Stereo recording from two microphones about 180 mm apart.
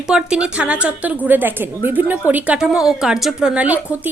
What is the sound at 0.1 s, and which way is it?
A woman's voice, 5° right (ahead or behind).